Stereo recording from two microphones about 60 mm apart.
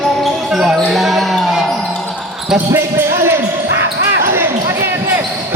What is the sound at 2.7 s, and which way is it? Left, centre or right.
Basketball bounce, right.